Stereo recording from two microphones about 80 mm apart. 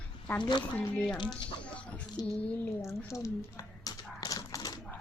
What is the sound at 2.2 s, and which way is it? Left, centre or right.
Speech, left.